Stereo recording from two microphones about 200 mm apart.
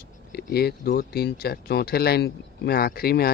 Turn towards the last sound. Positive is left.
turn(degrees=50)  # may be behind; listen again after turning